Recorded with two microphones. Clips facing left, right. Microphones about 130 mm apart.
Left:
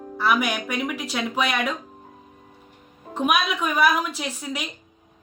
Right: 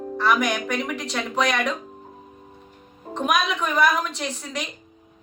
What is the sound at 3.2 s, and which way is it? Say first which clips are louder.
Speech: even; 5° left (ahead or behind).